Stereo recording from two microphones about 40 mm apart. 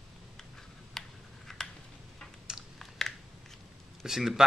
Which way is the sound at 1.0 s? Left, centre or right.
Centre.